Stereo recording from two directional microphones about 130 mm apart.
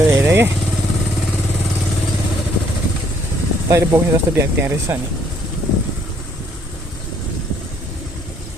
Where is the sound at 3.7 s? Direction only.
25° right (ahead or behind).